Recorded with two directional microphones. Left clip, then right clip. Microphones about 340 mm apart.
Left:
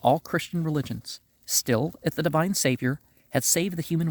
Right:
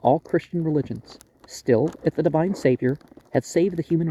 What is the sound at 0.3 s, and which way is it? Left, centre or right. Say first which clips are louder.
Speech: right 5 dB; left.